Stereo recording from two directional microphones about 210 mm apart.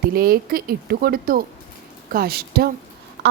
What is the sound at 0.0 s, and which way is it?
A woman's voice, 45° right (ahead or behind).